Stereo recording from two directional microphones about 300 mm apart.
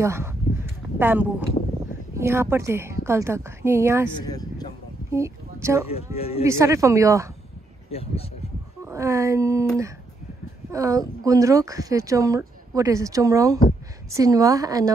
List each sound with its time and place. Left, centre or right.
0.0 s a sound: centre
2.1 s speech: centre
4.2 s a sound: centre
5.1 s speech: centre
6.1 s speech: centre
6.4 s speech: centre
7.9 s speech: centre
8.8 s speech: centre
10.7 s speech: centre